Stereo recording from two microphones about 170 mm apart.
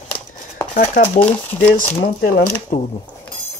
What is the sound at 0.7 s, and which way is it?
Speech, 50° left (ahead or behind).